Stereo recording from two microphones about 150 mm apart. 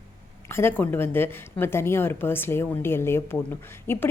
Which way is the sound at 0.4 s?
15° left (ahead or behind).